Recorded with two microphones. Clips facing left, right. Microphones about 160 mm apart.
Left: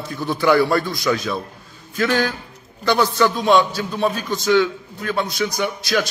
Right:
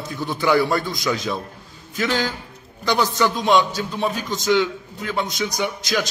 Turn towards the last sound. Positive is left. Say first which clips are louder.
# left 2 dB
turn(degrees=-15)  # may be behind; listen again after turning